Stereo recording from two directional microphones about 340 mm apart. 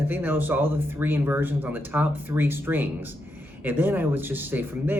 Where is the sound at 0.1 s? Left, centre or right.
Centre.